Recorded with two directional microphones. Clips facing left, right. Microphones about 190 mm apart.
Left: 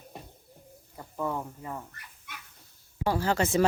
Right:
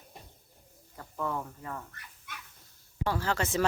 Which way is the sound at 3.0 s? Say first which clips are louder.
Left 4 dB; 15° left (ahead or behind).